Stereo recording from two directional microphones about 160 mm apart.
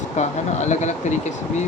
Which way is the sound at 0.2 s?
45° left (ahead or behind).